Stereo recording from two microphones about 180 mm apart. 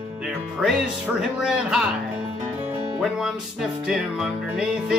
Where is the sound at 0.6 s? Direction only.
5° right (ahead or behind).